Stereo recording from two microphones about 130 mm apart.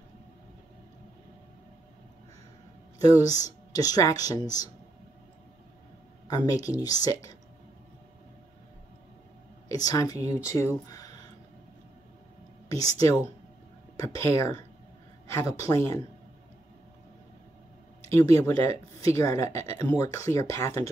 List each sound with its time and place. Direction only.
3.0 s speech: 25° left (ahead or behind)
6.2 s speech: 30° left (ahead or behind)
9.7 s speech: 30° left (ahead or behind)
13.9 s speech: 20° left (ahead or behind)
18.1 s speech: 20° left (ahead or behind)